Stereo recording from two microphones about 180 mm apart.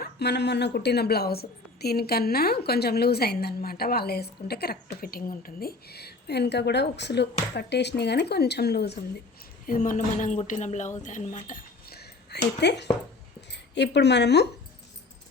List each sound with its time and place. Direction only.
0.0 s a woman's voice: 65° left (ahead or behind)
9.6 s speech: 50° left (ahead or behind); by 14.4 s 70° left (ahead or behind)